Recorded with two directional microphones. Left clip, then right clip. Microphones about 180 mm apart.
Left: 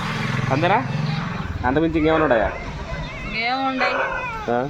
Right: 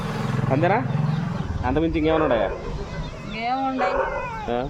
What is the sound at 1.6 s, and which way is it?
Speech, 40° left (ahead or behind).